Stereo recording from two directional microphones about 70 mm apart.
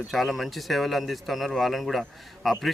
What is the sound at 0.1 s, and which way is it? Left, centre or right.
Speech, centre.